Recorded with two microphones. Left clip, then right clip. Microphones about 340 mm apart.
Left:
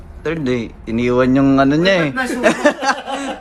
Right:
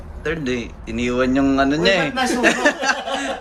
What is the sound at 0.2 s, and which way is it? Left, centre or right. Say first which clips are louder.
Speech: left 3 dB; centre.